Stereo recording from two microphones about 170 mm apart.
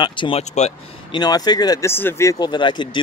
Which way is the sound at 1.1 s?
25° left (ahead or behind).